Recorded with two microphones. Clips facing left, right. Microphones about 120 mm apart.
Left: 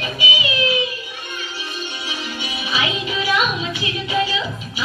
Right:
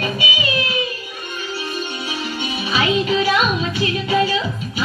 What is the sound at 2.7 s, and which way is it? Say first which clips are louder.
Music: right 6 dB; 40° right (ahead or behind).